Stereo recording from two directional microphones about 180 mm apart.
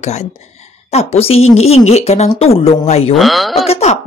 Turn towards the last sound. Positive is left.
turn(degrees=35)  # may be behind; listen again after turning